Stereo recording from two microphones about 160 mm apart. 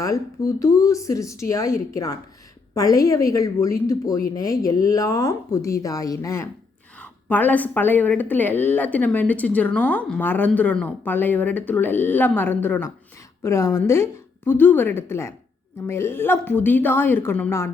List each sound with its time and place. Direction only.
0.0 s a woman's voice: 20° left (ahead or behind)